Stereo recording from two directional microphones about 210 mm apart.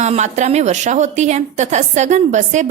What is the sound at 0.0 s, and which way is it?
A woman's voice, 35° right (ahead or behind).